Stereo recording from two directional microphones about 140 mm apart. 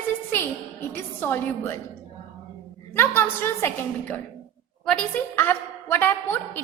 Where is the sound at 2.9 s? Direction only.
15° left (ahead or behind).